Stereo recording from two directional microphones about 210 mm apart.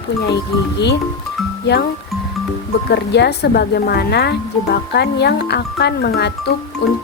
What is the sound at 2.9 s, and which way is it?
Speech, 50° left (ahead or behind).